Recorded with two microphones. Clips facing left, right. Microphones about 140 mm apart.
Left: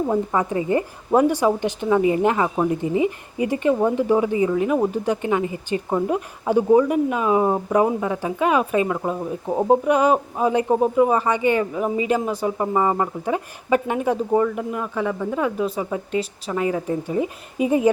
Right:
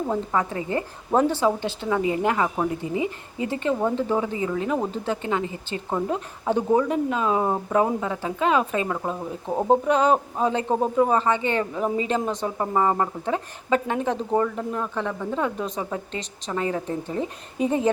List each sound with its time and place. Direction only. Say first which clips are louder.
0.1 s speech: left 4 dB; 10° left (ahead or behind)